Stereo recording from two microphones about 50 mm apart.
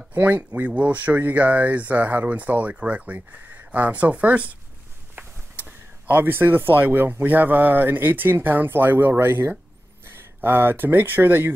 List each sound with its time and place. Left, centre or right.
0.1 s speech: right